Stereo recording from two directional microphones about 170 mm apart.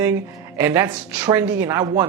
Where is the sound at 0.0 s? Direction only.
10° right (ahead or behind).